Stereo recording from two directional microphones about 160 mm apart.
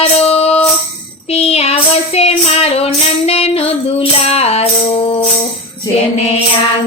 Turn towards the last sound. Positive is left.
turn(degrees=40)  # may be behind; listen again after turning